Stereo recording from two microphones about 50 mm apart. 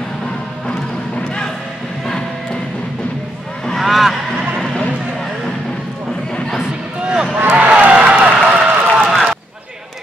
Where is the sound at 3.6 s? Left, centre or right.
Centre.